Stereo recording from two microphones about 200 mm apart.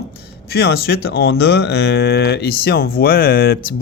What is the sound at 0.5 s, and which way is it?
Speech, 55° left (ahead or behind).